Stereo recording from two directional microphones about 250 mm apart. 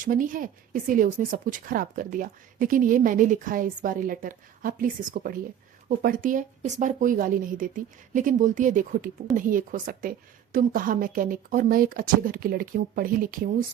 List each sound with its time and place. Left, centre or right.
0.0 s speech: right